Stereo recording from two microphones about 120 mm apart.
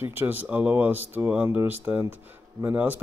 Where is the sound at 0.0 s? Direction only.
15° right (ahead or behind).